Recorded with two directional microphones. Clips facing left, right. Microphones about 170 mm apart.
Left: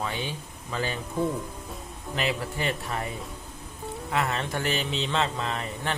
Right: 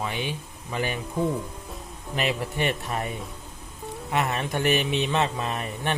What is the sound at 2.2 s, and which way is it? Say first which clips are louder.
Speech: right 3 dB; 20° right (ahead or behind).